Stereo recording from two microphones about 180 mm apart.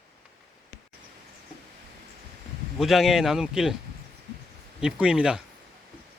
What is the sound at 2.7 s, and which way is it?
Speech, centre (ahead or behind).